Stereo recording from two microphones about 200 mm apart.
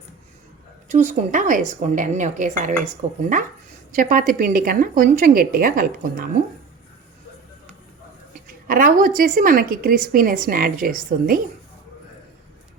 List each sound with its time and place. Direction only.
0.9 s a woman's voice: 35° right (ahead or behind)
8.6 s a woman's voice: 45° right (ahead or behind)